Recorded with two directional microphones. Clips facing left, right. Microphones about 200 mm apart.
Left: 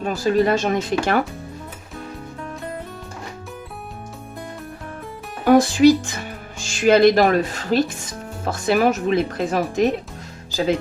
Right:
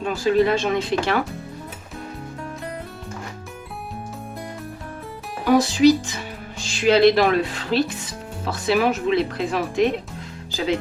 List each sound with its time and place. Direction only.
0.0 s speech: 45° left (ahead or behind)
5.5 s speech: 50° left (ahead or behind)